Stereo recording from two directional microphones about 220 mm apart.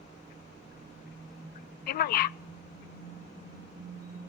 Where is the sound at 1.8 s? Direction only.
45° left (ahead or behind).